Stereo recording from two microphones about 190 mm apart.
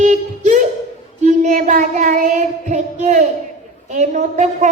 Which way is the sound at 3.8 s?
40° right (ahead or behind).